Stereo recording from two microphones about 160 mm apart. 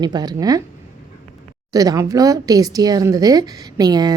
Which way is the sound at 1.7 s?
20° right (ahead or behind).